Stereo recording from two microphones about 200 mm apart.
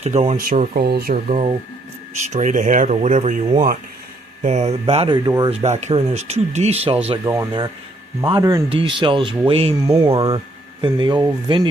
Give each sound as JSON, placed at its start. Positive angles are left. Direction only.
{"t": 0.0, "sound": "speech", "side_deg": -35}
{"t": 0.8, "sound": "speech", "side_deg": -50}
{"t": 1.3, "sound": "speech", "side_deg": -30}
{"t": 8.3, "sound": "speech", "side_deg": -15}
{"t": 9.8, "sound": "speech", "side_deg": -15}
{"t": 10.1, "sound": "speech", "side_deg": -25}